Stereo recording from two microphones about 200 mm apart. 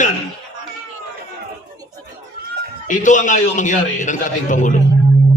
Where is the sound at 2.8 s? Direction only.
40° left (ahead or behind).